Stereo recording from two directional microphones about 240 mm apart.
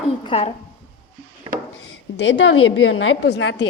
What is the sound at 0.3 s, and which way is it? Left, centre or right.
Speech, left.